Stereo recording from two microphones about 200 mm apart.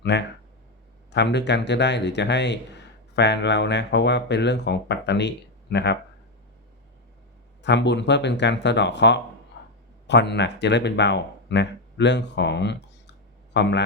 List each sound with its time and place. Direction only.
0.0 s speech: 60° left (ahead or behind)
7.6 s a man's voice: 60° left (ahead or behind)